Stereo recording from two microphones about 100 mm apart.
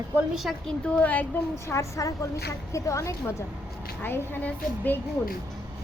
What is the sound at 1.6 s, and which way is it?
A woman's voice, 30° left (ahead or behind).